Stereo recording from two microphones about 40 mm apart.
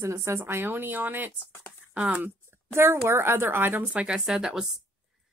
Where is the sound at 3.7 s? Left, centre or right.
Right.